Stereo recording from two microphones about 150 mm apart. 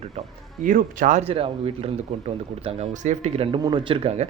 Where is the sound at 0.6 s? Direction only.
65° right (ahead or behind).